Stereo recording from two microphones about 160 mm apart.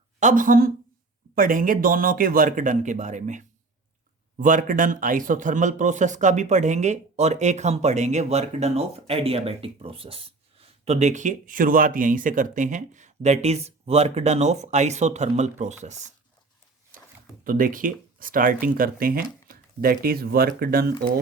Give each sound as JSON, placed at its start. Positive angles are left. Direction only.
{"t": 0.2, "sound": "speech", "side_deg": -55}
{"t": 17.4, "sound": "speech", "side_deg": -60}